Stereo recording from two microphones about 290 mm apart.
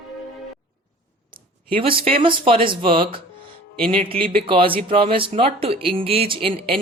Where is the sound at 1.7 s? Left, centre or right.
Centre.